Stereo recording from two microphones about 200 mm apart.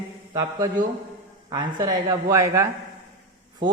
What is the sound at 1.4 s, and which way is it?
A woman's voice, 20° right (ahead or behind).